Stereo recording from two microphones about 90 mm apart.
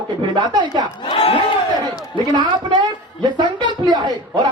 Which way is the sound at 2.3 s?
50° right (ahead or behind).